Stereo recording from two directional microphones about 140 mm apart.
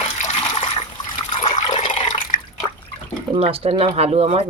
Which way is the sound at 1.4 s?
45° left (ahead or behind).